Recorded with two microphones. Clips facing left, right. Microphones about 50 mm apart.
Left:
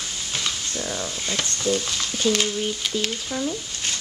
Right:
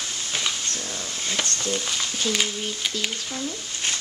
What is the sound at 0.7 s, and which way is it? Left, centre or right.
Speech, centre.